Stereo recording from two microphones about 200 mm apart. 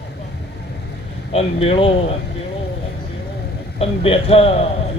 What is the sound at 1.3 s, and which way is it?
Speech, 30° left (ahead or behind).